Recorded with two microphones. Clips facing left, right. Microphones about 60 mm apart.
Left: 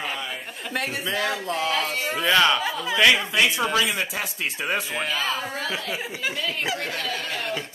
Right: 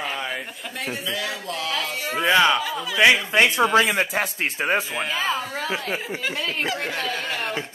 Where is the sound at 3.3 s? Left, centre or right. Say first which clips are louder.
Right 4 dB; right.